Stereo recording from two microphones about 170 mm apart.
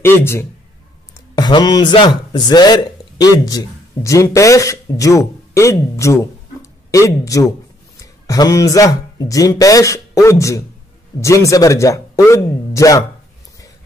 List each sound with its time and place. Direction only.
0.0 s a man's voice: 15° left (ahead or behind)